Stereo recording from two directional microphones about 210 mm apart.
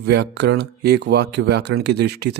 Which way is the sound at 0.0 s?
55° right (ahead or behind).